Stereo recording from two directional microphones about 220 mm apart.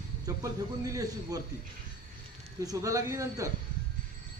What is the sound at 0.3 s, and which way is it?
A man's voice, 15° right (ahead or behind).